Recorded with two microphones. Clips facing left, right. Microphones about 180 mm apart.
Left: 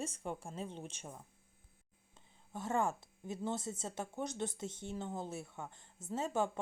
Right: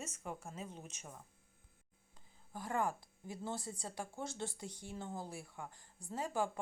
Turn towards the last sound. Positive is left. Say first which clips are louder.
# left 3 dB
turn(degrees=25)  # may be behind; listen again after turning